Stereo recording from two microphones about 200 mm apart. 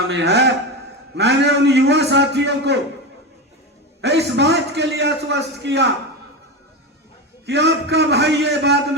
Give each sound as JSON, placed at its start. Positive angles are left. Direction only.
{"t": 0.1, "sound": "a man's voice", "side_deg": -60}
{"t": 4.0, "sound": "a man's voice", "side_deg": -60}
{"t": 7.4, "sound": "a man's voice", "side_deg": -60}